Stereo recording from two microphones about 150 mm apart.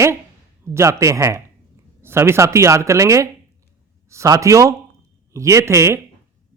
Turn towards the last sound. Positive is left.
turn(degrees=-20)  # may be behind; listen again after turning